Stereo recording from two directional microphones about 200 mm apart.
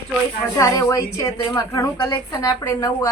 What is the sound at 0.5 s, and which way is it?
A woman's voice, 15° left (ahead or behind).